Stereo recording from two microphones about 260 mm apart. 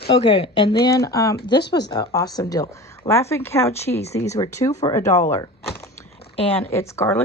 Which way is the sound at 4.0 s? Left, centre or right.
Left.